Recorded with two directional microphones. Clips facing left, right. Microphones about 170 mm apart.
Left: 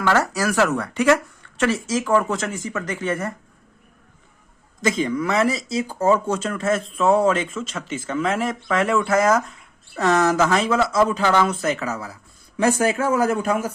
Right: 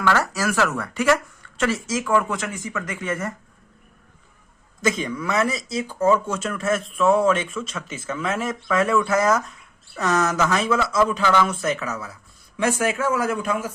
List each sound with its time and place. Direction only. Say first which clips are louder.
0.0 s speech: left 2 dB; 25° left (ahead or behind)
4.9 s speech: left 3 dB; 30° left (ahead or behind)